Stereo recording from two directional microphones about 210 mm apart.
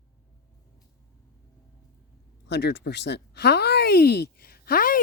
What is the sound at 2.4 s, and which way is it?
Speech, 55° left (ahead or behind).